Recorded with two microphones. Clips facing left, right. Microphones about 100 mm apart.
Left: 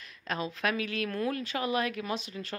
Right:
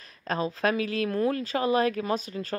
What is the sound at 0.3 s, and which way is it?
Speech, 35° right (ahead or behind).